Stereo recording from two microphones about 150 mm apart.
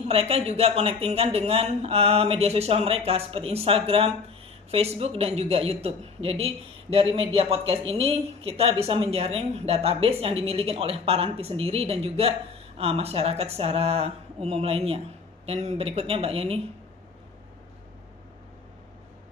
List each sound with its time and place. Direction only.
0.1 s a man's voice: 40° right (ahead or behind)